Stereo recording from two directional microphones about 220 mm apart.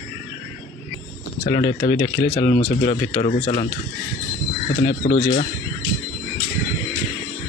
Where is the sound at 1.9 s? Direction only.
15° left (ahead or behind).